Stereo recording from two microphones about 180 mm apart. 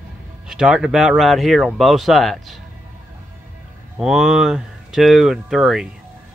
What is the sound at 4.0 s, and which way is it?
Speech, 5° right (ahead or behind).